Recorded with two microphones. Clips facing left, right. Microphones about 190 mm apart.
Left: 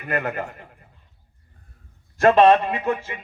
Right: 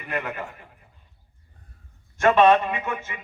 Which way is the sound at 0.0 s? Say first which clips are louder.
Left 4 dB; 45° left (ahead or behind).